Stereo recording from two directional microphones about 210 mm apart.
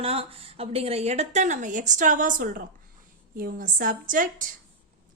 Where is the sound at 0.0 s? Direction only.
25° right (ahead or behind).